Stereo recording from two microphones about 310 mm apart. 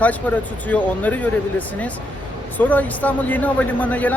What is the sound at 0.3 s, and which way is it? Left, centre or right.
Speech, centre.